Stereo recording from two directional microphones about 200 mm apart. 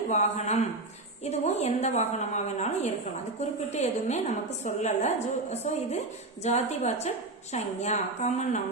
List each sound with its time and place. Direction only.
0.1 s a woman's voice: 35° left (ahead or behind)